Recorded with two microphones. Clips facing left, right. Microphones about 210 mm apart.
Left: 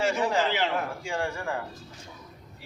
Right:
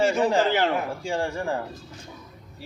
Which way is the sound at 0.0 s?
30° right (ahead or behind).